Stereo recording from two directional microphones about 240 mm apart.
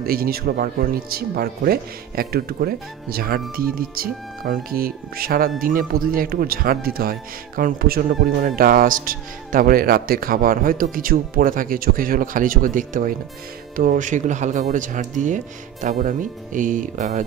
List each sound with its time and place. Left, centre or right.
0.0 s speech: right